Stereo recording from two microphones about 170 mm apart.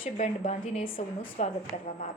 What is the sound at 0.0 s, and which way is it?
A woman's voice, 40° left (ahead or behind).